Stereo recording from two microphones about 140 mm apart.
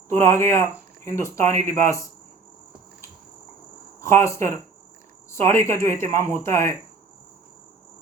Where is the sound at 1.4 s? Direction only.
65° right (ahead or behind).